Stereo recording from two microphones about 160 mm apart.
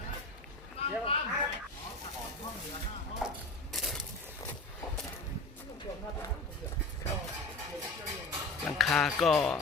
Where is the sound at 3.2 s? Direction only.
Centre (ahead or behind).